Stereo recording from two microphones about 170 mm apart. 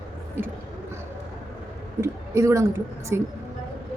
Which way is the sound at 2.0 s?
15° right (ahead or behind).